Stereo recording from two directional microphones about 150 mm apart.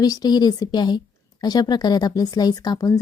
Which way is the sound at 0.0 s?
25° left (ahead or behind).